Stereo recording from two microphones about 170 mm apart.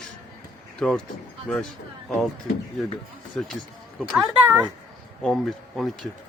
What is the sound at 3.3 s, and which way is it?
Speech, 5° left (ahead or behind).